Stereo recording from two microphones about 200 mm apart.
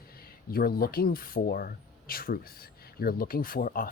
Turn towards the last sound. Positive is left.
turn(degrees=45)  # may be behind; listen again after turning